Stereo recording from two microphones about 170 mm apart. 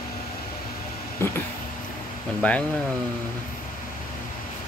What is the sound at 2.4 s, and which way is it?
Speech, 10° left (ahead or behind).